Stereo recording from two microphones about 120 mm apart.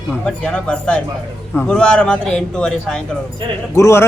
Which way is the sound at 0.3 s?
10° left (ahead or behind).